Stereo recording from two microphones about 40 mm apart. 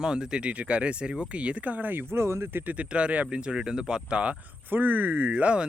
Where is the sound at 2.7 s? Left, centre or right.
Right.